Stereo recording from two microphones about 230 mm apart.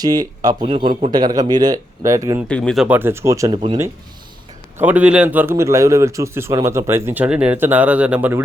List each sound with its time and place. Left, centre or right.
0.0 s a man's voice: centre
2.5 s a man's voice: centre